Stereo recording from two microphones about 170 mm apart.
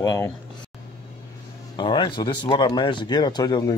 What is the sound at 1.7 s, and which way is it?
Speech, 25° left (ahead or behind).